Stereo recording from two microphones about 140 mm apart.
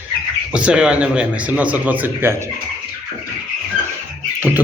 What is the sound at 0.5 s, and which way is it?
A man's voice, 5° right (ahead or behind).